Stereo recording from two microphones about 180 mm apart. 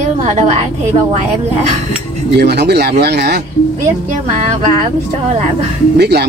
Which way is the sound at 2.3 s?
65° right (ahead or behind).